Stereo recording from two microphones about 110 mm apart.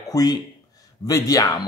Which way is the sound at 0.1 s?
35° left (ahead or behind).